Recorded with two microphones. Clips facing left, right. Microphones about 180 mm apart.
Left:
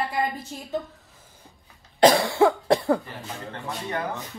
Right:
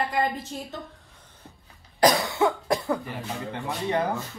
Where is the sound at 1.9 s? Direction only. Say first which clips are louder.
Left 4 dB; 25° left (ahead or behind).